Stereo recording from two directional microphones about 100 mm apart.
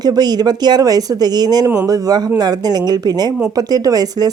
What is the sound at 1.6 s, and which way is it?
Speech, 30° right (ahead or behind).